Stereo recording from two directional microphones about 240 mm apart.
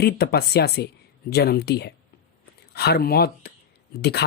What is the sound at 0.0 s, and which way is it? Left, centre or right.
Speech, left.